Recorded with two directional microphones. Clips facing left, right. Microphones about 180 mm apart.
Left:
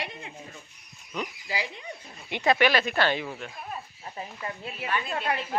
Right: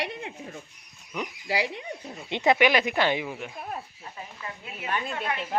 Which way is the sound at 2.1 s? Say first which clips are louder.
Right 2 dB; 25° right (ahead or behind).